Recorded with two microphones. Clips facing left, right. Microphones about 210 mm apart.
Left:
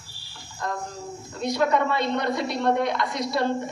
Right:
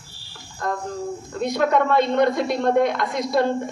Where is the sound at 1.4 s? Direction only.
50° right (ahead or behind).